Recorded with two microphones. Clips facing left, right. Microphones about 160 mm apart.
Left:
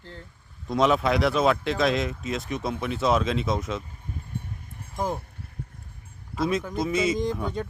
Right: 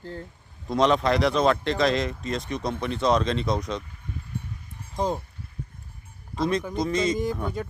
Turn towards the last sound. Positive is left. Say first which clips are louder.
# even
turn(degrees=0)  # may be behind; listen again after turning